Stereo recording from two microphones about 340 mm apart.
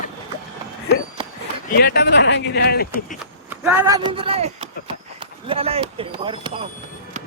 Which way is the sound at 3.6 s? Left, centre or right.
Centre.